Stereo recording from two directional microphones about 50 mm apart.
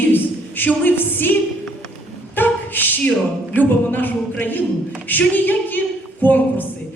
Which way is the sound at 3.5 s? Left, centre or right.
Left.